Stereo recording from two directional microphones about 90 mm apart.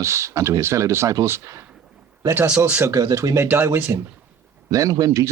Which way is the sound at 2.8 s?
40° right (ahead or behind).